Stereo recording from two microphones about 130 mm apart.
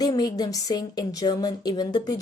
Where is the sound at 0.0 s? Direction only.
30° left (ahead or behind).